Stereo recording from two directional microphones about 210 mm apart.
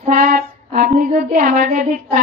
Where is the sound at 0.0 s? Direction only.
40° right (ahead or behind).